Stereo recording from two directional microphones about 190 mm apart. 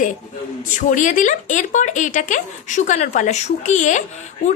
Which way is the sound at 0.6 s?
45° left (ahead or behind).